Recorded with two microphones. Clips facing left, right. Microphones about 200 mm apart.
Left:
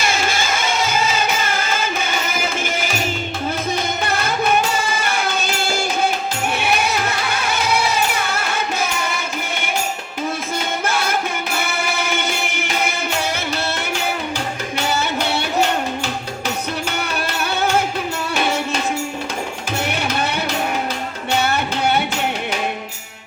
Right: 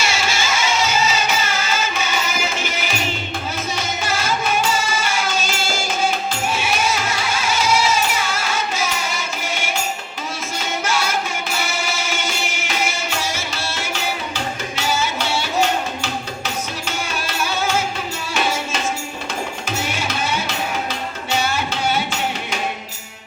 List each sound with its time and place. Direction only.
0.0 s music: 55° left (ahead or behind)
4.0 s music: 60° left (ahead or behind)
10.8 s music: 55° left (ahead or behind)
14.8 s music: 60° left (ahead or behind)
17.2 s music: 60° left (ahead or behind)
19.8 s music: 60° left (ahead or behind)